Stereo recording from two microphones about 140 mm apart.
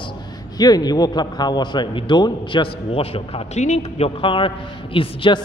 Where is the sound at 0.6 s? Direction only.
30° left (ahead or behind); by 4.1 s 55° left (ahead or behind).